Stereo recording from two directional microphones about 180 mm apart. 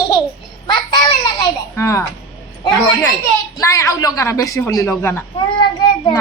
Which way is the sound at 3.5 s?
20° left (ahead or behind).